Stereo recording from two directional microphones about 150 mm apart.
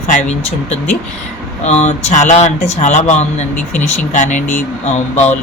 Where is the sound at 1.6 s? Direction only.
45° left (ahead or behind).